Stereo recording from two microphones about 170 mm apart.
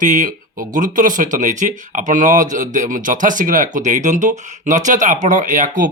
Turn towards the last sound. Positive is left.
turn(degrees=-50)  # may be behind; listen again after turning